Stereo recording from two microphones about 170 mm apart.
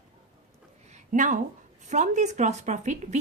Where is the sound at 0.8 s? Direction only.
45° right (ahead or behind).